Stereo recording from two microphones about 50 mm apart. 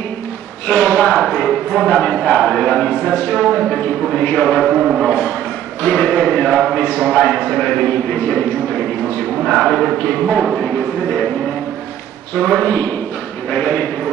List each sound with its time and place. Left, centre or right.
0.7 s speech: left
1.2 s speech: centre
3.4 s speech: centre
4.2 s speech: left
4.6 s speech: centre
5.8 s speech: left
10.4 s speech: centre
12.4 s speech: left